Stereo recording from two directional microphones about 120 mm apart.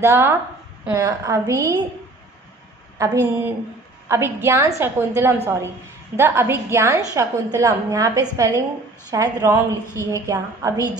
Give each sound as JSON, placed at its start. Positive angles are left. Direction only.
{"t": 0.0, "sound": "a woman's voice", "side_deg": -20}
{"t": 3.0, "sound": "a woman's voice", "side_deg": -25}